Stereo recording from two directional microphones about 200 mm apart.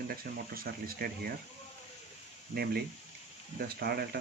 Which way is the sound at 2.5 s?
50° right (ahead or behind).